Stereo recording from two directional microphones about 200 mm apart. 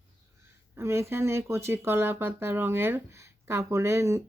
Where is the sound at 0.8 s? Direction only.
15° right (ahead or behind).